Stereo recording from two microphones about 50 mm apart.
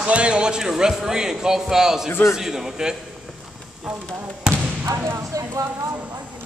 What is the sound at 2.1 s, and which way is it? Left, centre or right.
Speech, left.